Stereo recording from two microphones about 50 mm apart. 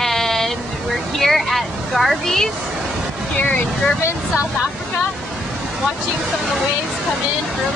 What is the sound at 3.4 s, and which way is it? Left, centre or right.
Speech, left.